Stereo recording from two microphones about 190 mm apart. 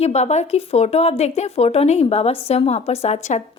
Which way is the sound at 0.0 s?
35° left (ahead or behind).